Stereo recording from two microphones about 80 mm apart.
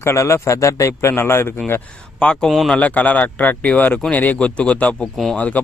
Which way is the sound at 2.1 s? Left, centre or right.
Centre.